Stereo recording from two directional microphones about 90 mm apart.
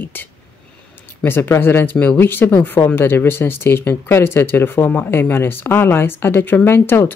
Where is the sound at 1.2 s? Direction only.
25° left (ahead or behind).